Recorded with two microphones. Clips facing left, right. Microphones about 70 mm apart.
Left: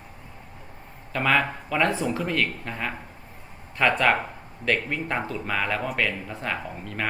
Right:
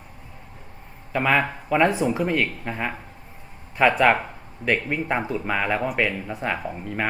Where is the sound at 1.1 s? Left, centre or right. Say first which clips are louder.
Right 2 dB; centre.